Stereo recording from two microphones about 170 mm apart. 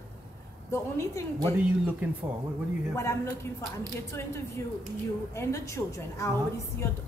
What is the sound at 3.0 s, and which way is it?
Speech, 20° left (ahead or behind).